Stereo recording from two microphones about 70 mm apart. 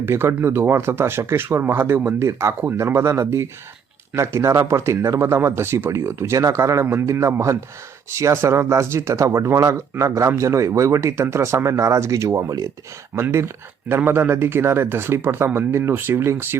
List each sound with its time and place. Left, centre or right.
0.0 s speech: right
6.4 s speech: right
13.3 s speech: right